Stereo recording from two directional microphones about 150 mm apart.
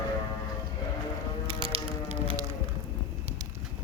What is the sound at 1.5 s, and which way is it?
Music, 35° right (ahead or behind).